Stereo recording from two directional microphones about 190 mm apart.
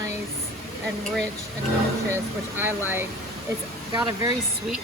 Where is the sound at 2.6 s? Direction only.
10° right (ahead or behind).